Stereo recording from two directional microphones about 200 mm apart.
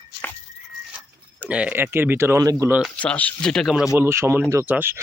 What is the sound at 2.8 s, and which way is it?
Speech, 5° left (ahead or behind).